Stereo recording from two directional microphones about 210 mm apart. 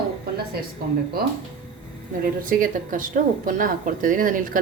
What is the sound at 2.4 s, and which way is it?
Speech, 40° right (ahead or behind).